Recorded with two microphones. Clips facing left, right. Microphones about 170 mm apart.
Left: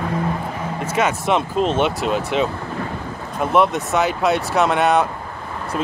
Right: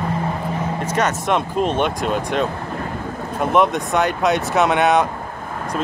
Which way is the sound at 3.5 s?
Centre (ahead or behind).